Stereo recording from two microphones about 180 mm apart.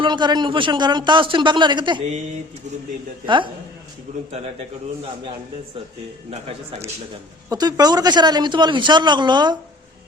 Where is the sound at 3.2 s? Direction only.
25° right (ahead or behind).